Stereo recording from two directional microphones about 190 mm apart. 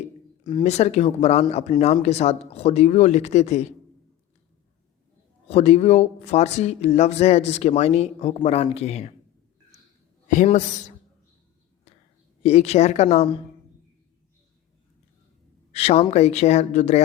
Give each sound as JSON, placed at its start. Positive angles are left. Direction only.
{"t": 0.6, "sound": "speech", "side_deg": 35}
{"t": 5.5, "sound": "speech", "side_deg": 35}
{"t": 10.2, "sound": "speech", "side_deg": 40}
{"t": 12.4, "sound": "speech", "side_deg": 35}
{"t": 15.7, "sound": "speech", "side_deg": 30}